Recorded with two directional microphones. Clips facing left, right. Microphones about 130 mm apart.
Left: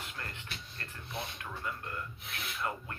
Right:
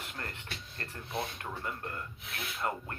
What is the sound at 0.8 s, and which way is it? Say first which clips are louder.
Speech: right 6 dB; 40° right (ahead or behind).